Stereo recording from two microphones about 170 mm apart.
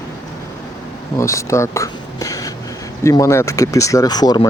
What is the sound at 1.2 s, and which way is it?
Speech, 15° left (ahead or behind).